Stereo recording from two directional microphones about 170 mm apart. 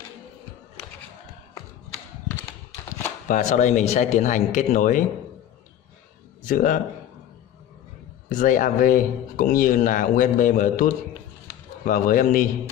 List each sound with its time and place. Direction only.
3.3 s speech: 45° left (ahead or behind)
6.4 s speech: 50° left (ahead or behind)
8.3 s speech: 50° left (ahead or behind)